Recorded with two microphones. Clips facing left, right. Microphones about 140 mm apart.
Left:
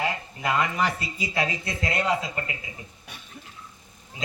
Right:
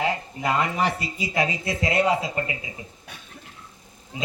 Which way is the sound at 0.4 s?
25° right (ahead or behind).